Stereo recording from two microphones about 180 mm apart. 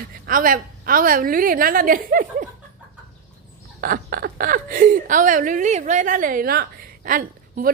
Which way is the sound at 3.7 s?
55° right (ahead or behind).